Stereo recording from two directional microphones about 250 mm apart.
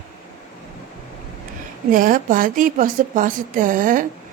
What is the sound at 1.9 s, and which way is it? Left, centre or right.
Speech, right.